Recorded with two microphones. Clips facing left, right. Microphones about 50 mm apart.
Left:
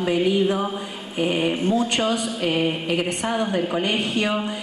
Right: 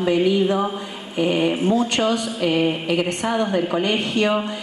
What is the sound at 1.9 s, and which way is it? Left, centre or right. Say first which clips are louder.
A woman's voice: right 2 dB; centre.